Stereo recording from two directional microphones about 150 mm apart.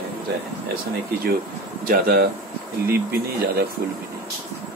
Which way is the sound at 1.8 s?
85° right.